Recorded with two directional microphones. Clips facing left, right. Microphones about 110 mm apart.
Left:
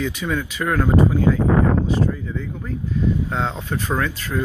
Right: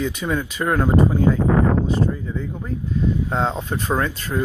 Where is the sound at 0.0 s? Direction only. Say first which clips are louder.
Right 1 dB; 20° right (ahead or behind).